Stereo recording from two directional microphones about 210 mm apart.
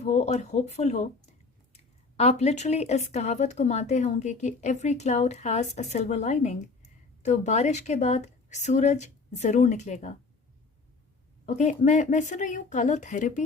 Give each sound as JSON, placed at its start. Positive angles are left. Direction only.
{"t": 0.0, "sound": "speech", "side_deg": 30}
{"t": 11.4, "sound": "speech", "side_deg": 35}